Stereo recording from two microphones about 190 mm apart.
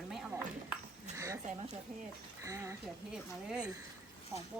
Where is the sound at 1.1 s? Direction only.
15° right (ahead or behind).